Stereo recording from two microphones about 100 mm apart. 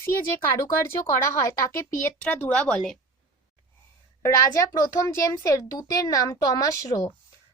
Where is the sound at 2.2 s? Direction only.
15° left (ahead or behind).